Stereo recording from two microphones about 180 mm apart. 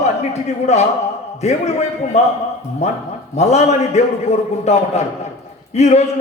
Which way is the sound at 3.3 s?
40° left (ahead or behind).